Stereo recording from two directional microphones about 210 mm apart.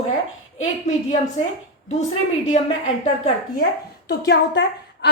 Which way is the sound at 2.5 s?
35° left (ahead or behind).